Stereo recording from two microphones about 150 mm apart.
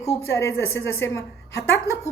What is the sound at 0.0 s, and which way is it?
A woman's voice, 20° left (ahead or behind).